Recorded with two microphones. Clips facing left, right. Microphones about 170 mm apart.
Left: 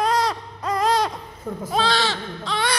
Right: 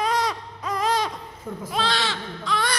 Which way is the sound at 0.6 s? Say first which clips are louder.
Left 3 dB; 65° left (ahead or behind).